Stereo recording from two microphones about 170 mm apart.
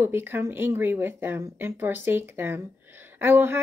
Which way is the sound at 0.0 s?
15° right (ahead or behind).